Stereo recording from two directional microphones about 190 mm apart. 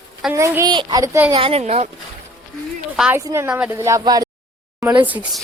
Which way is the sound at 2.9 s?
5° right (ahead or behind).